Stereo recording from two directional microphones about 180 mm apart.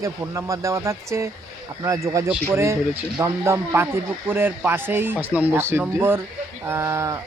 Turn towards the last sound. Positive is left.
turn(degrees=-15)  # may be behind; listen again after turning